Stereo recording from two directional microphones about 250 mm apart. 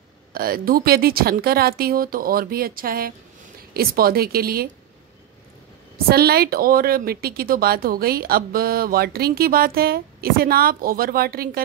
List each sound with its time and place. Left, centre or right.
0.3 s speech: right
6.0 s speech: right